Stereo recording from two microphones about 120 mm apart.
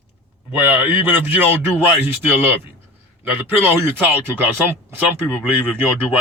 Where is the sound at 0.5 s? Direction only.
15° right (ahead or behind).